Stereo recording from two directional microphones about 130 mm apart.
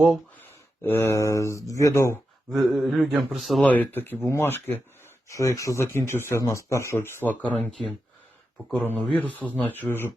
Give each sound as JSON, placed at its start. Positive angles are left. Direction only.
{"t": 0.9, "sound": "speech", "side_deg": 20}
{"t": 2.5, "sound": "a man's voice", "side_deg": 0}
{"t": 3.7, "sound": "speech", "side_deg": 15}
{"t": 8.7, "sound": "speech", "side_deg": 10}